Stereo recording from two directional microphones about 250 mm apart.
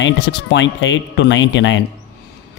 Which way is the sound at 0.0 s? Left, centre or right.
Left.